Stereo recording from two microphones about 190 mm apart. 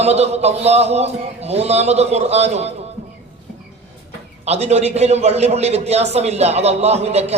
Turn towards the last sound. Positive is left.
turn(degrees=-35)  # may be behind; listen again after turning